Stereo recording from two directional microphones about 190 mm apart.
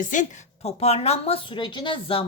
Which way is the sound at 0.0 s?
40° left (ahead or behind).